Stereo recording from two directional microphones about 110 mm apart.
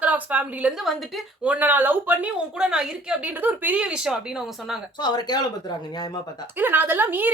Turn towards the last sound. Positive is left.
turn(degrees=-15)  # may be behind; listen again after turning